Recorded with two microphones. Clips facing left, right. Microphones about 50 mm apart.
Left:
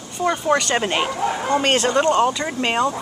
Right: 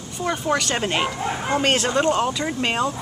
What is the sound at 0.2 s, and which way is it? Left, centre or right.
Speech, centre.